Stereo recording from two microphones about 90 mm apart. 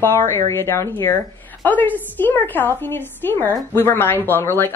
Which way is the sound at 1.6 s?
20° left (ahead or behind).